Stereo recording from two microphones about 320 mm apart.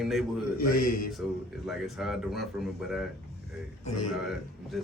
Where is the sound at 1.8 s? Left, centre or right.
Centre.